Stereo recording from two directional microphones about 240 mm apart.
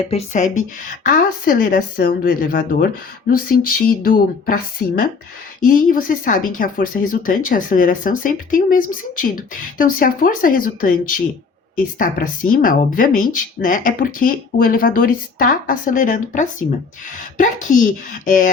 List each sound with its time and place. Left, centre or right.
0.1 s speech: left
5.5 s speech: left
11.9 s speech: left